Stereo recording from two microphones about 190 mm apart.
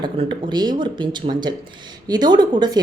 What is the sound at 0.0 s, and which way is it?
A woman's voice, 25° right (ahead or behind).